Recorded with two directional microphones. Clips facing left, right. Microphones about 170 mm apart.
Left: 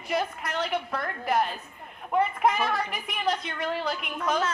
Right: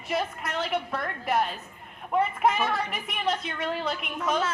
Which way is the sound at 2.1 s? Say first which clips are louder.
Even; centre (ahead or behind).